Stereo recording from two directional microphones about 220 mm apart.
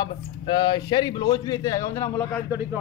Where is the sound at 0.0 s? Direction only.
20° left (ahead or behind).